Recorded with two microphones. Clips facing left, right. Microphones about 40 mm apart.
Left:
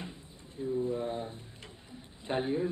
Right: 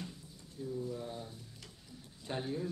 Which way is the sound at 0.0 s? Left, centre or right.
Left.